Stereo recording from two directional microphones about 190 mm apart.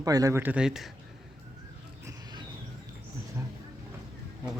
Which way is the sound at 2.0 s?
20° right (ahead or behind).